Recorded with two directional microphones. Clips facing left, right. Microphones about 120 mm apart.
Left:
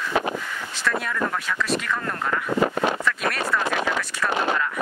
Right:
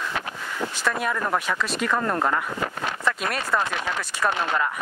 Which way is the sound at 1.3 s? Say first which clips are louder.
Even; 25° right (ahead or behind).